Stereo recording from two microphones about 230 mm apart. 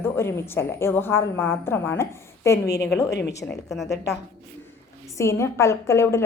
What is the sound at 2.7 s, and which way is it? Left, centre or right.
A woman's voice, left.